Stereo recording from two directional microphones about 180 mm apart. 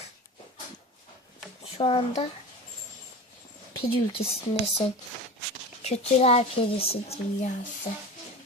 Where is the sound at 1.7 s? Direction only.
30° left (ahead or behind).